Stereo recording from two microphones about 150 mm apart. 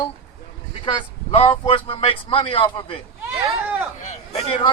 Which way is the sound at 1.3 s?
40° left (ahead or behind).